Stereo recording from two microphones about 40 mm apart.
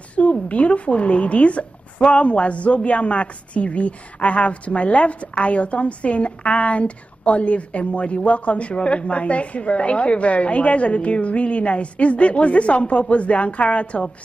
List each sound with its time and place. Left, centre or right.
0.1 s a woman's voice: left